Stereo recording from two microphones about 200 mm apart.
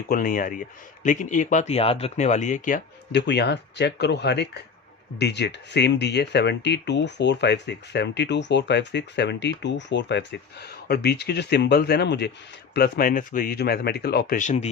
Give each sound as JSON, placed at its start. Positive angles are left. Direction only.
{"t": 0.1, "sound": "speech", "side_deg": 45}
{"t": 3.1, "sound": "speech", "side_deg": 55}
{"t": 14.3, "sound": "speech", "side_deg": 35}